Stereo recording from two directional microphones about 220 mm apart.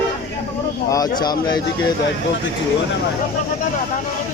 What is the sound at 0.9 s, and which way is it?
Speech, 15° left (ahead or behind).